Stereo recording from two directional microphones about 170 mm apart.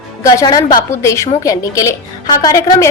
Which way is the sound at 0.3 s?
20° left (ahead or behind).